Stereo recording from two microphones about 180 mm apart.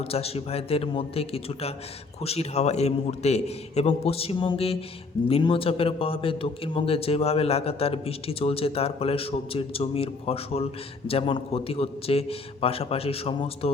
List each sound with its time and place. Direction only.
0.0 s a man's voice: 35° left (ahead or behind)